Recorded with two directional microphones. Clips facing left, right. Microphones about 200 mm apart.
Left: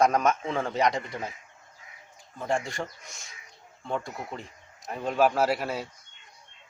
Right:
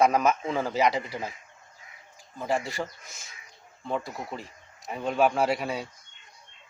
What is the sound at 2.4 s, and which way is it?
A man's voice, centre (ahead or behind).